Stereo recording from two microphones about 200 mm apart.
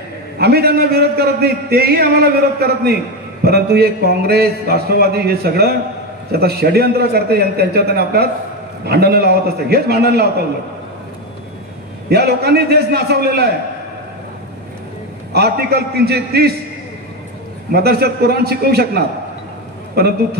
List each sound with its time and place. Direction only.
0.4 s a man's voice: 50° right (ahead or behind)
12.1 s a man's voice: 55° right (ahead or behind)
15.3 s a man's voice: 50° right (ahead or behind)
17.6 s a man's voice: 50° right (ahead or behind)